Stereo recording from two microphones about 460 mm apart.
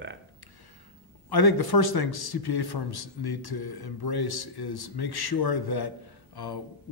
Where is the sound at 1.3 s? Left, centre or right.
Left.